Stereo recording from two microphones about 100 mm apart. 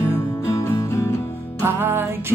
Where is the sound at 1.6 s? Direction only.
25° right (ahead or behind).